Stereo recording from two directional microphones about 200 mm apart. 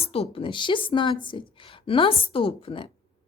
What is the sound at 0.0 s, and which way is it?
Speech, 30° left (ahead or behind).